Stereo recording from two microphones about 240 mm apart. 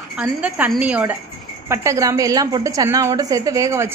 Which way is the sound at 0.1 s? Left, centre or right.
Centre.